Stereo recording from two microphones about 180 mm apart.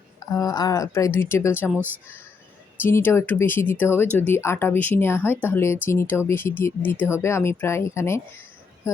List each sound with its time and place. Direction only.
0.2 s speech: 20° left (ahead or behind)
1.7 s speech: 10° right (ahead or behind)
2.8 s speech: 15° left (ahead or behind)